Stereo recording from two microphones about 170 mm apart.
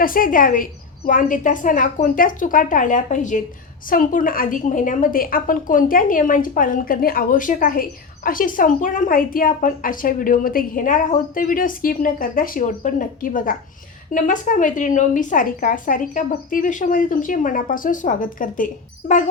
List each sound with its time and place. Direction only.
0.0 s a woman's voice: 55° left (ahead or behind)